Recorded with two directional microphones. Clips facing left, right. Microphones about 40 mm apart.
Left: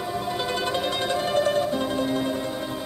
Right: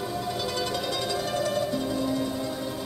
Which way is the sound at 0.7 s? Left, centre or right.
Left.